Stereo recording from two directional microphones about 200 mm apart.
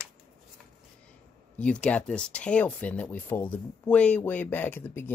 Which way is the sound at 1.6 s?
5° left (ahead or behind).